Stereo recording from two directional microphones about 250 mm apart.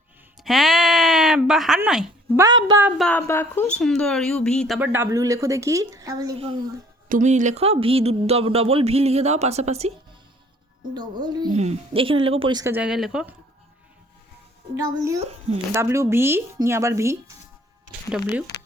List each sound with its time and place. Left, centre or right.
0.4 s a sound: centre
2.4 s speech: centre
2.8 s speech: centre; by 9.9 s right
10.9 s speech: centre
14.8 s speech: centre
15.2 s speech: right
15.7 s speech: centre